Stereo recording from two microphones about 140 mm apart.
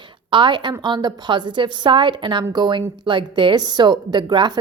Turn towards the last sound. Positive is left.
turn(degrees=-30)  # may be behind; listen again after turning